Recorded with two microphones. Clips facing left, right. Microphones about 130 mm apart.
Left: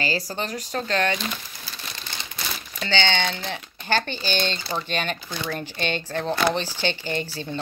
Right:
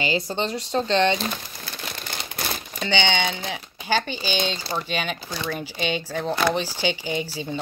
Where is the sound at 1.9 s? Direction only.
55° right (ahead or behind).